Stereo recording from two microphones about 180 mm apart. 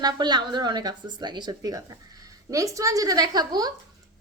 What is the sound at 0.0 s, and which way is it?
A child's voice, 25° right (ahead or behind).